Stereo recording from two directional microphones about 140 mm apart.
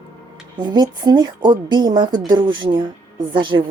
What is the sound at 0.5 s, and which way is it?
A woman's voice, 30° right (ahead or behind).